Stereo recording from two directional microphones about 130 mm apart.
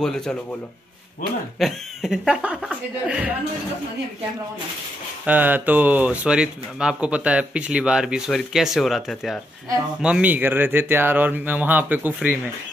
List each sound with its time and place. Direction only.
0.0 s speech: 5° left (ahead or behind)
1.6 s speech: centre (ahead or behind)
5.2 s speech: 15° right (ahead or behind)